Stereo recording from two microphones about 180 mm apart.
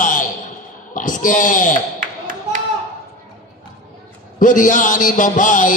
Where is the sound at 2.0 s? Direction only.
50° right (ahead or behind).